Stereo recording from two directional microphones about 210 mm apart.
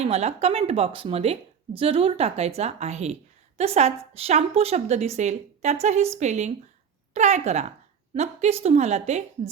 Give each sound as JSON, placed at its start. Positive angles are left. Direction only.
{"t": 0.0, "sound": "a woman's voice", "side_deg": -30}